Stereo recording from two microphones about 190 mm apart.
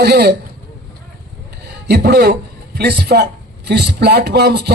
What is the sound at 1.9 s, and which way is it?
A man's voice, 55° right (ahead or behind).